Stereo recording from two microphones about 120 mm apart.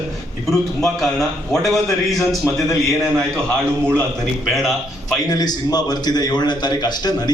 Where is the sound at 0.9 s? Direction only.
Centre (ahead or behind).